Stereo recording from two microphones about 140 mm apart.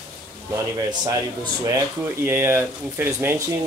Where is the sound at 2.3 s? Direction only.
15° right (ahead or behind).